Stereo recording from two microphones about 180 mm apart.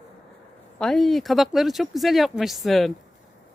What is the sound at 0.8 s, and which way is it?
Speech, 5° left (ahead or behind).